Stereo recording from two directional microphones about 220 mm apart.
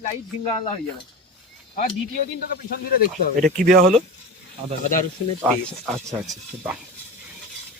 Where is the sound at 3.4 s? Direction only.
40° right (ahead or behind).